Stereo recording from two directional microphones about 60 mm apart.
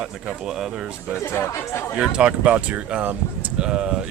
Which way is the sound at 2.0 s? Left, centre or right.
Centre.